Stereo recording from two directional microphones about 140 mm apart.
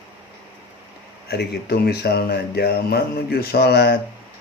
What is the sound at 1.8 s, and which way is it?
Speech, 90° left.